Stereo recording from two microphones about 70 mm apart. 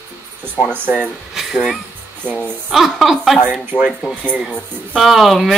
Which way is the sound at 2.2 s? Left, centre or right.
Centre.